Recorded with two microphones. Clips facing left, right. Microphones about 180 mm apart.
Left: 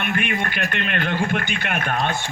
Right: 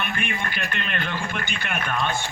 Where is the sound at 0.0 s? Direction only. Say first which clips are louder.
Left 5 dB; 60° left (ahead or behind).